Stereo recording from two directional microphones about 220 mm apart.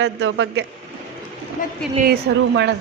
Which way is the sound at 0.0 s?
60° right (ahead or behind).